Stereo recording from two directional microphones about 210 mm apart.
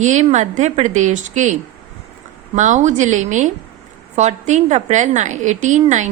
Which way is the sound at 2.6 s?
35° right (ahead or behind).